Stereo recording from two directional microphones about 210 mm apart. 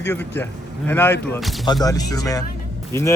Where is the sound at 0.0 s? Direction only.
10° left (ahead or behind).